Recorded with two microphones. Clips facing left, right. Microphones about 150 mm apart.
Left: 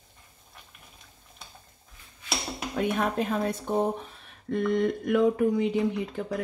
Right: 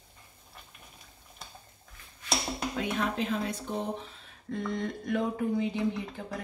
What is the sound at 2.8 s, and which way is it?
Speech, 50° left (ahead or behind).